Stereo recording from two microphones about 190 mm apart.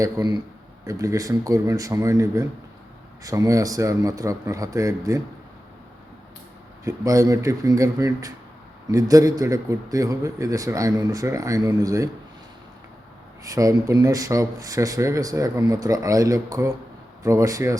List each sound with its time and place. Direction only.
0.0 s speech: 20° right (ahead or behind)
6.8 s speech: 15° right (ahead or behind)
13.4 s speech: 20° right (ahead or behind)